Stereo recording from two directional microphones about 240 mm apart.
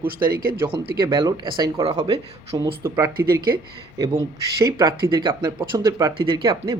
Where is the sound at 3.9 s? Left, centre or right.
Centre.